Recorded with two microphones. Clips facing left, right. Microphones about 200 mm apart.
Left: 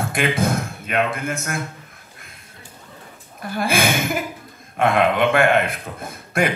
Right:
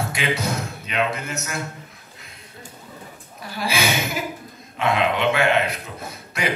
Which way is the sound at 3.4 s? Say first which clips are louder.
Left 4 dB; 50° left (ahead or behind).